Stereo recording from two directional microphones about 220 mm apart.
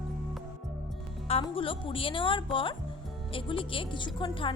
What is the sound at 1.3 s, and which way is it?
A woman's voice, 25° left (ahead or behind).